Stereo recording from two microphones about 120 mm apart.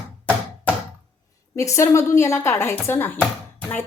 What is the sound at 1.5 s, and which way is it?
A woman's voice, 25° left (ahead or behind).